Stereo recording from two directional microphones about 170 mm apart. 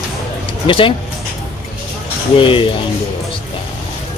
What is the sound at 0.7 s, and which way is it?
Speech, 30° left (ahead or behind).